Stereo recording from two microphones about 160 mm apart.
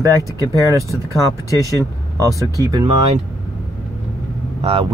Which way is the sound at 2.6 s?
25° right (ahead or behind).